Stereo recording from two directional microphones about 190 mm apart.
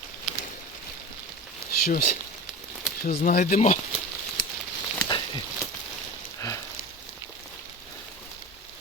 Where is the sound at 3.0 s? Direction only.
50° left (ahead or behind).